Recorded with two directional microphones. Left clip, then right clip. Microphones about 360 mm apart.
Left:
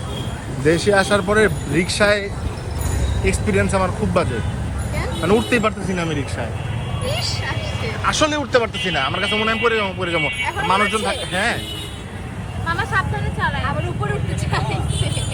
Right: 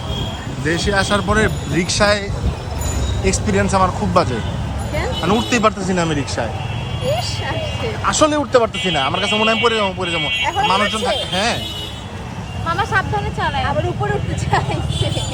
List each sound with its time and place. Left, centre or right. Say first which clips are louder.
0.6 s speech: left 2 dB; centre
3.2 s speech: right 1 dB; centre
7.1 s vehicle: right 3 dB; centre
8.0 s speech: right 3 dB; centre
12.6 s vehicle: right 3 dB; right